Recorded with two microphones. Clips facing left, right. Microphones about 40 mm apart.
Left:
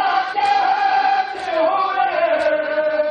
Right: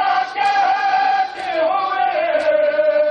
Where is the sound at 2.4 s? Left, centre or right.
Centre.